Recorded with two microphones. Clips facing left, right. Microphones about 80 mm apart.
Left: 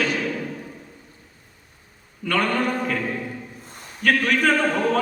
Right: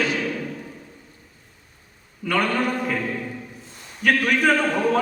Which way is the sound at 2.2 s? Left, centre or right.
Centre.